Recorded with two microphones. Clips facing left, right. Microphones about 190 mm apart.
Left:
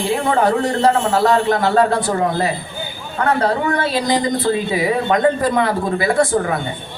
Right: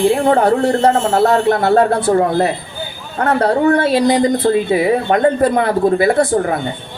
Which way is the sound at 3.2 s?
45° right (ahead or behind).